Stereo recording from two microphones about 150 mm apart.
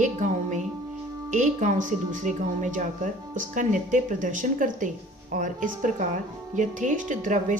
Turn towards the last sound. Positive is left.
turn(degrees=-55)  # may be behind; listen again after turning